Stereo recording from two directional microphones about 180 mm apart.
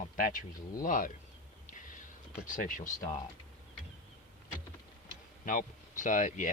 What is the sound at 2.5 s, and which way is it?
Speech, 45° left (ahead or behind).